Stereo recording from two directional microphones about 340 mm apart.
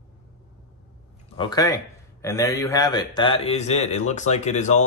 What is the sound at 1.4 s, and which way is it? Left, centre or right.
A man's voice, centre.